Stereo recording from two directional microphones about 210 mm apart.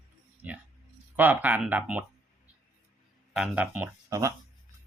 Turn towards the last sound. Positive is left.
turn(degrees=-15)  # may be behind; listen again after turning